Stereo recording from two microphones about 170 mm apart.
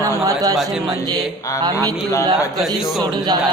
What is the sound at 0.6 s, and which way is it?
Speech, centre (ahead or behind).